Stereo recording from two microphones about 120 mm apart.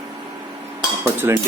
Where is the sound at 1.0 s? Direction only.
20° right (ahead or behind).